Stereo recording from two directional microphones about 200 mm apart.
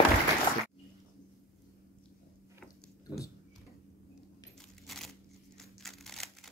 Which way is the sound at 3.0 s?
15° left (ahead or behind).